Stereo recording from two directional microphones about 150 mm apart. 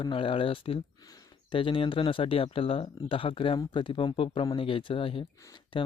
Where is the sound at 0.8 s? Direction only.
25° left (ahead or behind).